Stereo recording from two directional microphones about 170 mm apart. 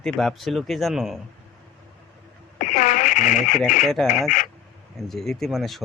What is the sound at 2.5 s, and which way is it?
Radio, 50° left (ahead or behind).